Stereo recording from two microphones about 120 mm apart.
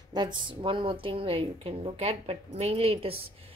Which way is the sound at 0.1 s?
40° right (ahead or behind).